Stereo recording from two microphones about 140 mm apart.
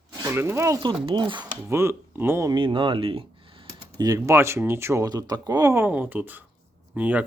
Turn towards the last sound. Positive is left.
turn(degrees=-10)  # may be behind; listen again after turning